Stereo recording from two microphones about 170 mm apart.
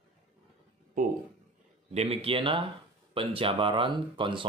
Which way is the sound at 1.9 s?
35° right (ahead or behind).